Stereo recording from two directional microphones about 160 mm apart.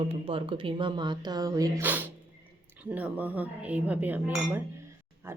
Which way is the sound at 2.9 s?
10° right (ahead or behind).